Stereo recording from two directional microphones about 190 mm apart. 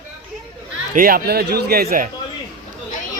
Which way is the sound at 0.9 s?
50° right (ahead or behind).